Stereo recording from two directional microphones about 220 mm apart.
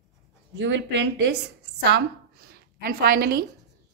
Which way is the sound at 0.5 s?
55° right (ahead or behind).